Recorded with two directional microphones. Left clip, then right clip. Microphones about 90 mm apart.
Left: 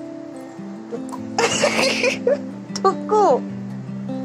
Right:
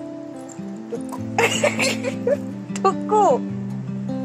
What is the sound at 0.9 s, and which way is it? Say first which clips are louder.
Music: even; 40° left (ahead or behind).